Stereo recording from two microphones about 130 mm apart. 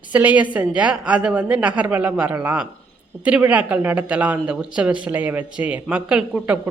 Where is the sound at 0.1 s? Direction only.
10° right (ahead or behind).